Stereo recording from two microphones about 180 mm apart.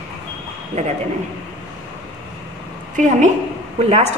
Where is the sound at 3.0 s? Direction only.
45° right (ahead or behind).